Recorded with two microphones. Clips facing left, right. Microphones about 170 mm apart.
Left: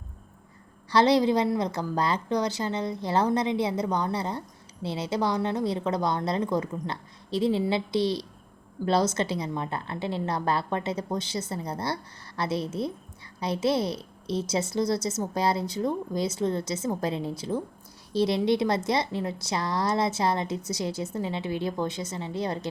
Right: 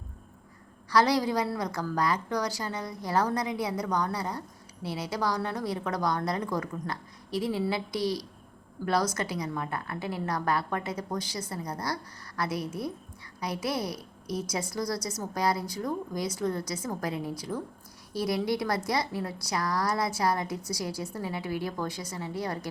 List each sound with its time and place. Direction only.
0.9 s a woman's voice: 25° left (ahead or behind)